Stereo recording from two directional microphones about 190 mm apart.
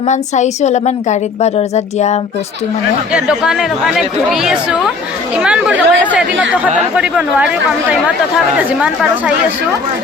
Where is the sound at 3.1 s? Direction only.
5° right (ahead or behind).